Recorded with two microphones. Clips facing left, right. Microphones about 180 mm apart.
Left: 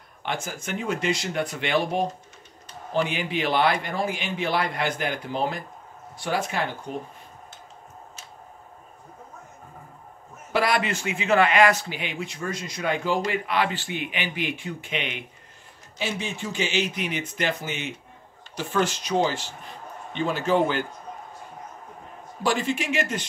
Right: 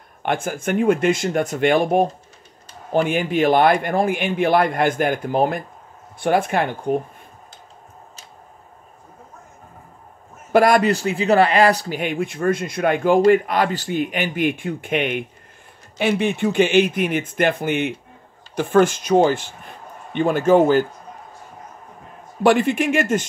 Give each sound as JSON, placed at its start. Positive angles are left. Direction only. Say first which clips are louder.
{"t": 0.2, "sound": "a man's voice", "louder": "right 8 dB", "side_deg": -55}
{"t": 10.5, "sound": "a man's voice", "louder": "right 9 dB", "side_deg": -45}
{"t": 13.3, "sound": "a man's voice", "louder": "right 9 dB", "side_deg": -45}
{"t": 22.4, "sound": "speech", "louder": "right 9 dB", "side_deg": -60}